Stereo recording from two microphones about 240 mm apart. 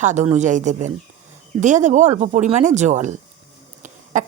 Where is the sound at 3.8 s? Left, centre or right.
Right.